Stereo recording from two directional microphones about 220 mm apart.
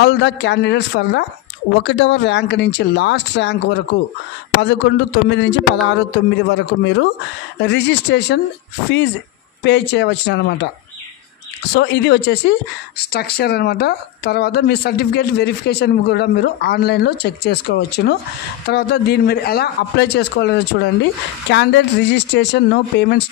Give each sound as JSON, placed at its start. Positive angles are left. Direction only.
{"t": 0.0, "sound": "speech", "side_deg": 50}
{"t": 9.6, "sound": "speech", "side_deg": 50}
{"t": 11.7, "sound": "speech", "side_deg": 50}